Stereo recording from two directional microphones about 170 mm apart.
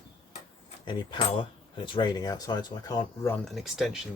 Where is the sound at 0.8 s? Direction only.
25° left (ahead or behind).